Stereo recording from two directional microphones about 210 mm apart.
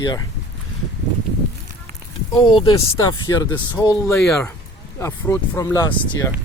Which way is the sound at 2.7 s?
15° left (ahead or behind).